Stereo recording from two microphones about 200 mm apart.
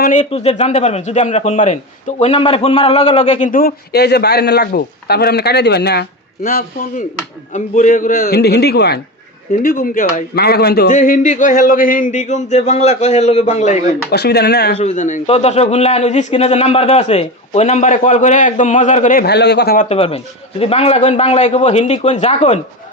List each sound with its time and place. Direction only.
0.0 s a man's voice: 35° left (ahead or behind); by 10.9 s 50° left (ahead or behind)
10.9 s a man's voice: 40° left (ahead or behind)
14.1 s a man's voice: 55° left (ahead or behind)
14.8 s a man's voice: 35° left (ahead or behind)
20.0 s a man's voice: 30° left (ahead or behind)